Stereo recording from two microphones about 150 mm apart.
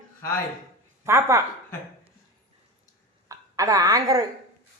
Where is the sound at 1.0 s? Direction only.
20° right (ahead or behind).